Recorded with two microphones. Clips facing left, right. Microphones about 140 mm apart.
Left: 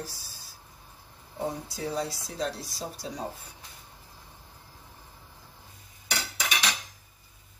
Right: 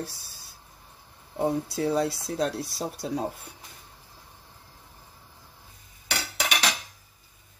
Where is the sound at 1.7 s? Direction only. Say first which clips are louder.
Right 6 dB; 65° right (ahead or behind).